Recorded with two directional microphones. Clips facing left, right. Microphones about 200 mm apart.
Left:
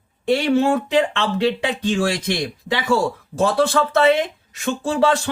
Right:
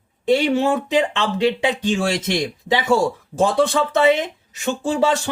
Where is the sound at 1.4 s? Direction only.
20° right (ahead or behind).